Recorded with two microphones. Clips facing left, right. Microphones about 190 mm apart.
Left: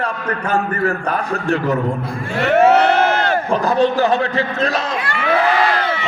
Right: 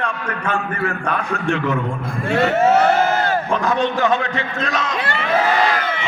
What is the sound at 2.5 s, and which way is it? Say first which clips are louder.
Crowd: left 4 dB; 65° left (ahead or behind).